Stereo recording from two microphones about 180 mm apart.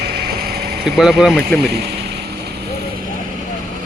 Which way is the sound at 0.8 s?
Centre (ahead or behind).